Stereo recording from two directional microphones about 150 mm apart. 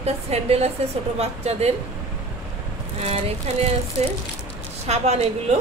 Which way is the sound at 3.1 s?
40° right (ahead or behind).